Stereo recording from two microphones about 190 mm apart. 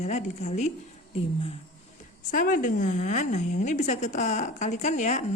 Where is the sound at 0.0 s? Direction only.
35° left (ahead or behind).